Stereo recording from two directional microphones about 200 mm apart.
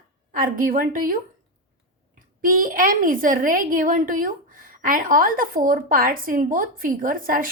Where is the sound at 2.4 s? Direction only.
45° right (ahead or behind).